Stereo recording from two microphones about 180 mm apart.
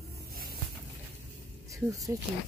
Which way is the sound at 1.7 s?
15° right (ahead or behind).